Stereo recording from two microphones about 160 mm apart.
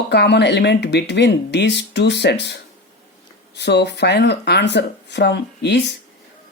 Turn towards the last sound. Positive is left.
turn(degrees=90)